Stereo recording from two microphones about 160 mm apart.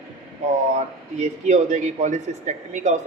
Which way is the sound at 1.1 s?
45° right (ahead or behind).